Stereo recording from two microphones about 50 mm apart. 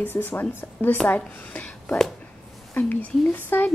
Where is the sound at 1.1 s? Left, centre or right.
Left.